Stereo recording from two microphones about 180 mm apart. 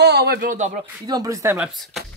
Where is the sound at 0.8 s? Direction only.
20° right (ahead or behind).